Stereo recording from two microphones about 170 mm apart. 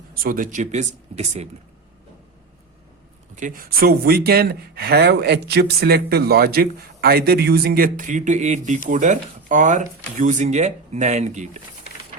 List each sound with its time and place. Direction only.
0.1 s speech: 55° right (ahead or behind); by 1.5 s 40° right (ahead or behind)
3.3 s speech: 50° right (ahead or behind)